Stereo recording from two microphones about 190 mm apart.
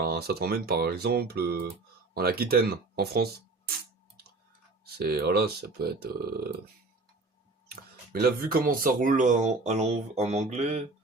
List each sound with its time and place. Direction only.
0.0 s speech: 55° right (ahead or behind)
4.9 s speech: 55° right (ahead or behind)
8.1 s speech: 50° right (ahead or behind); by 10.8 s 35° right (ahead or behind)